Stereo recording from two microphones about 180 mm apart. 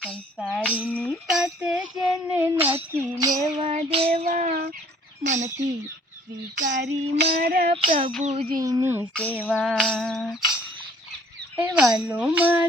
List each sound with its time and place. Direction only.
0.0 s a sound: 5° left (ahead or behind)
2.0 s child singing: 5° right (ahead or behind)
3.2 s child singing: 20° right (ahead or behind)
3.4 s child singing: 40° right (ahead or behind)
4.3 s a sound: 45° right (ahead or behind)
6.7 s child singing: 75° right (ahead or behind)
6.9 s music: 35° right (ahead or behind)
7.3 s music: 60° right (ahead or behind)
7.7 s music: 30° right (ahead or behind)
8.4 s speech: 20° right (ahead or behind)
9.3 s a sound: 5° right (ahead or behind)
11.5 s speech: 5° right (ahead or behind)